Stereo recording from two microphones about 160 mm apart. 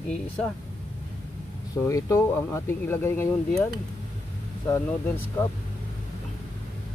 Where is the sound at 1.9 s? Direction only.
20° left (ahead or behind).